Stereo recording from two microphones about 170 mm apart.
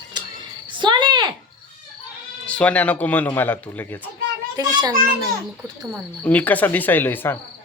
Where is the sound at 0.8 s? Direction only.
25° right (ahead or behind).